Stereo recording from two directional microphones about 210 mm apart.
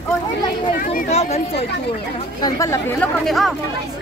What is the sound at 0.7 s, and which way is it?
Speech, 40° left (ahead or behind).